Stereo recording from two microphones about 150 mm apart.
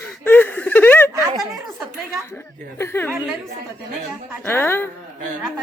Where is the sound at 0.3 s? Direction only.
10° left (ahead or behind).